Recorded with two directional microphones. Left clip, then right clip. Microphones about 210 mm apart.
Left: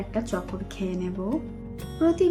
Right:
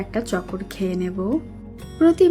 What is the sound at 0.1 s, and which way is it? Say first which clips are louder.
Speech: right 4 dB; 20° right (ahead or behind).